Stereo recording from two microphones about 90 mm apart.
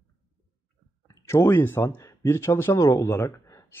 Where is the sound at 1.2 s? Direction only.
30° left (ahead or behind).